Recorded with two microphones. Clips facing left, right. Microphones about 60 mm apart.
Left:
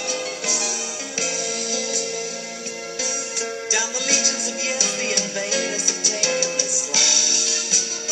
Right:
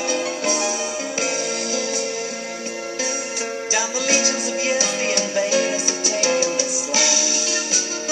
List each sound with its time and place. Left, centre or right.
0.5 s music: right
3.7 s music: right